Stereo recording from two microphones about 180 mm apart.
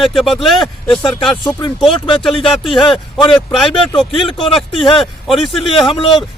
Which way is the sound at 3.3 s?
Centre (ahead or behind).